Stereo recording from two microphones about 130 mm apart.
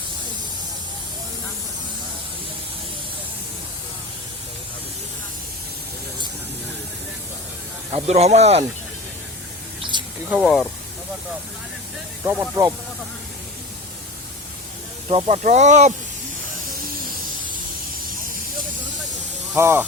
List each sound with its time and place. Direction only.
7.9 s speech: 55° right (ahead or behind)
9.9 s spray: 35° right (ahead or behind)
10.4 s speech: 5° left (ahead or behind)
12.2 s speech: 15° right (ahead or behind)
15.1 s speech: 60° right (ahead or behind)
19.5 s speech: 15° right (ahead or behind)